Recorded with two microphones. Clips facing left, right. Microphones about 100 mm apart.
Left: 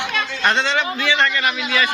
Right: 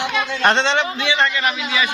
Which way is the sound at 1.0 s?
15° right (ahead or behind).